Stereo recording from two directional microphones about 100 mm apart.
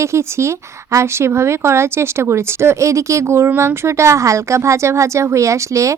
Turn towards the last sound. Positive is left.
turn(degrees=-30)  # may be behind; listen again after turning